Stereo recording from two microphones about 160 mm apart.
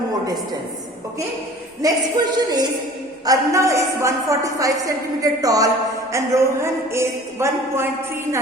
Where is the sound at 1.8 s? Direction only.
20° right (ahead or behind).